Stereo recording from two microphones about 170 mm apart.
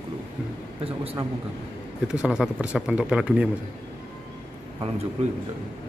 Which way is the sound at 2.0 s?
5° right (ahead or behind).